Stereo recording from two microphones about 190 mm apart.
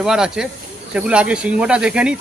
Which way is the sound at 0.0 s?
5° right (ahead or behind).